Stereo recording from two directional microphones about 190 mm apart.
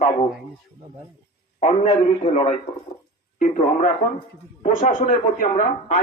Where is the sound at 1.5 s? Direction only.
35° left (ahead or behind).